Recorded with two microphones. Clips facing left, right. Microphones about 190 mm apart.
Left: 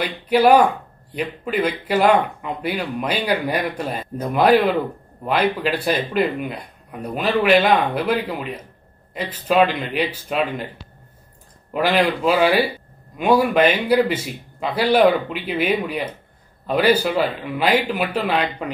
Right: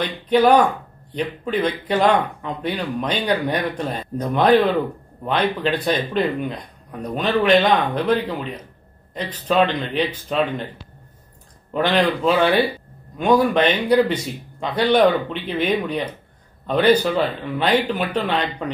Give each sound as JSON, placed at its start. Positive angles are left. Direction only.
{"t": 0.0, "sound": "speech", "side_deg": 10}
{"t": 11.7, "sound": "speech", "side_deg": 5}